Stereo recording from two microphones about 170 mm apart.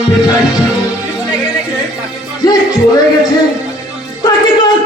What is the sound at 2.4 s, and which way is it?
Music, 20° left (ahead or behind).